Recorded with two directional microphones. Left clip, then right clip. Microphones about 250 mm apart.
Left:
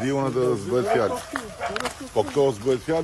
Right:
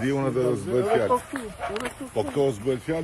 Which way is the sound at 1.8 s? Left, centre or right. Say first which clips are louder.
Left 5 dB; centre.